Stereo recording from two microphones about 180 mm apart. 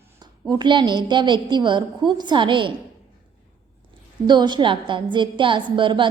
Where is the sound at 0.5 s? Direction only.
25° right (ahead or behind).